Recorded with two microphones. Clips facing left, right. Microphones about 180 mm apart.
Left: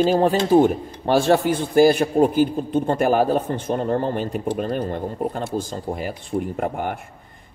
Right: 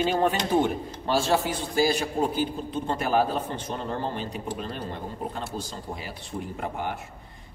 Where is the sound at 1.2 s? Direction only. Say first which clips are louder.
Left 8 dB; 55° left (ahead or behind).